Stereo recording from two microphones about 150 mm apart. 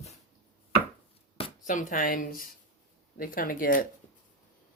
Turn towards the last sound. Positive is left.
turn(degrees=65)  # may be behind; listen again after turning